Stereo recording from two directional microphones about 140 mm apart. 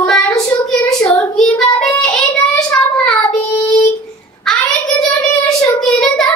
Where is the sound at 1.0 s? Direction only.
25° left (ahead or behind).